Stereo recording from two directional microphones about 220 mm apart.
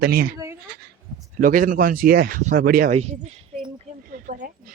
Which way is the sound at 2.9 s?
30° right (ahead or behind).